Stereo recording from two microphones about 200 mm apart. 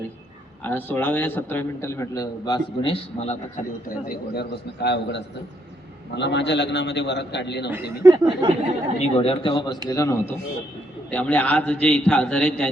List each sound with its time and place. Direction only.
0.6 s a man's voice: 10° left (ahead or behind); by 3.3 s 30° left (ahead or behind)
3.8 s a man's voice: 50° left (ahead or behind)
8.0 s a sound: 20° right (ahead or behind)
9.0 s a man's voice: 30° left (ahead or behind)
9.9 s a man's voice: 15° left (ahead or behind)